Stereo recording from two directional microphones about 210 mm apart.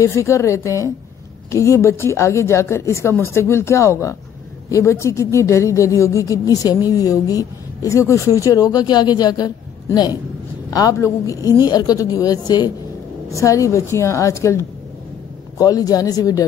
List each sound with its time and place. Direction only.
0.0 s a woman's voice: 15° left (ahead or behind)